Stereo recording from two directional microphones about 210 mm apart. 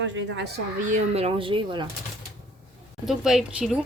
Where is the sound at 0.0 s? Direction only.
60° right (ahead or behind).